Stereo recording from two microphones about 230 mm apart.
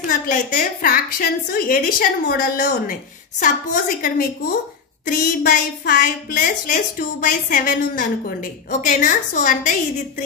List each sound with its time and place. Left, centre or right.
0.1 s a woman's voice: left